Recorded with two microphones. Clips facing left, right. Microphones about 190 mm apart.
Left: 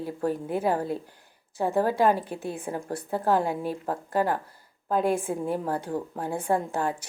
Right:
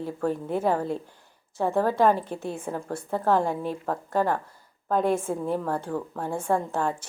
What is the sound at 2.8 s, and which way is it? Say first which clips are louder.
Speech: even; 35° left (ahead or behind).